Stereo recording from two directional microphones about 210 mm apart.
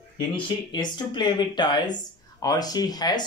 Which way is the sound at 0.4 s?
20° left (ahead or behind).